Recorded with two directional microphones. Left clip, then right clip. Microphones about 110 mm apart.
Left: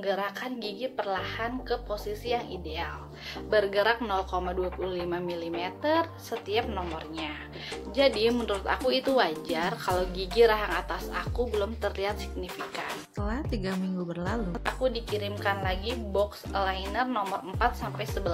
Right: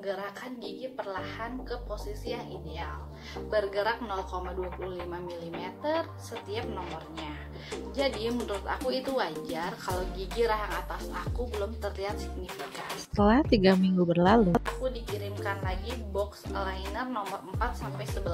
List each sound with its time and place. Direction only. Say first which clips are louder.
0.0 s a woman's voice: left 5 dB; 10° left (ahead or behind)
7.9 s speech: left 7 dB; 5° left (ahead or behind)
13.2 s speech: right 13 dB; 75° right (ahead or behind)
14.6 s a woman's voice: left 4 dB; 5° left (ahead or behind)